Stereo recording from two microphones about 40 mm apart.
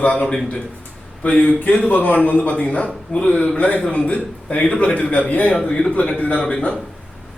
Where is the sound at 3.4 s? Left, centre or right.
Left.